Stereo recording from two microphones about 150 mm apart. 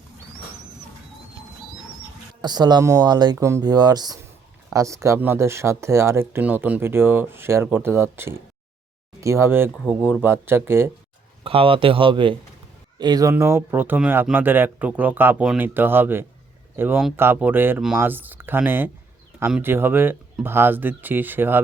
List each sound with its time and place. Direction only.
2.4 s speech: 30° right (ahead or behind)
11.4 s speech: 35° right (ahead or behind)
13.3 s speech: 15° right (ahead or behind)